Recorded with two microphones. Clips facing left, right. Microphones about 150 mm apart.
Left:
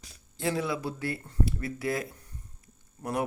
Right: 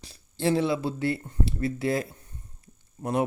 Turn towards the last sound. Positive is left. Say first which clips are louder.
# right 4 dB
turn(degrees=-25)  # may be behind; listen again after turning